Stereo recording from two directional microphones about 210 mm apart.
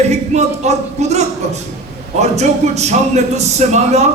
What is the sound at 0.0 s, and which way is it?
Speech, 30° right (ahead or behind).